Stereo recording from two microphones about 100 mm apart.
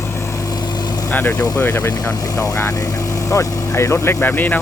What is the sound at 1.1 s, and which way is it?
Speech, 15° left (ahead or behind).